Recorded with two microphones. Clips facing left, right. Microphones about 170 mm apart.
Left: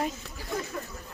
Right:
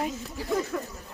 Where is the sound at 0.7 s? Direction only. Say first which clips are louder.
Right 5 dB; 80° right.